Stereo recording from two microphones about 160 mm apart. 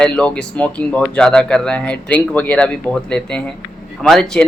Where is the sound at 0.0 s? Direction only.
5° left (ahead or behind).